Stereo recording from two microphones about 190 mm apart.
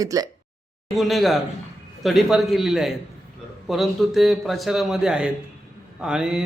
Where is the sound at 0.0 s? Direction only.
20° right (ahead or behind).